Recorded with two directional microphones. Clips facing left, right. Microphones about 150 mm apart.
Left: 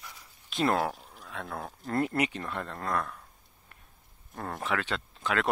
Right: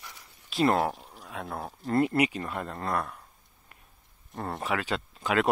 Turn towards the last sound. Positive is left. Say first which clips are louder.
# right 3 dB
turn(degrees=-10)  # may be behind; listen again after turning